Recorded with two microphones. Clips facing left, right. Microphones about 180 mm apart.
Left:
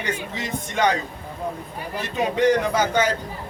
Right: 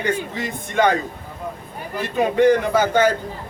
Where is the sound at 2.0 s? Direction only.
50° right (ahead or behind).